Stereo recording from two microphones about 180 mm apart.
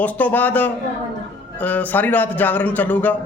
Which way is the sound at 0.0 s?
10° left (ahead or behind).